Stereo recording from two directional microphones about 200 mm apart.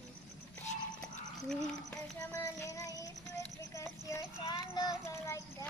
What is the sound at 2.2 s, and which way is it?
Child singing, 15° left (ahead or behind).